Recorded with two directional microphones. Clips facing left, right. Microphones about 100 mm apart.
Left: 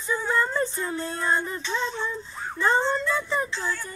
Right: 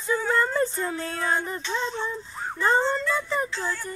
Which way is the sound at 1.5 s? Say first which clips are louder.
Even; 35° right (ahead or behind).